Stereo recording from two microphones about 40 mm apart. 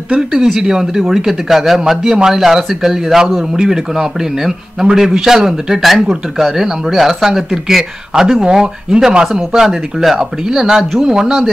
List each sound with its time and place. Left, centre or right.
0.1 s speech: centre